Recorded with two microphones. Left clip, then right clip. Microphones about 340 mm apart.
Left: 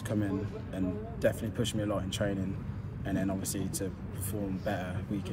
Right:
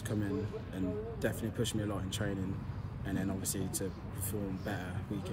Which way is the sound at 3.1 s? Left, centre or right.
Centre.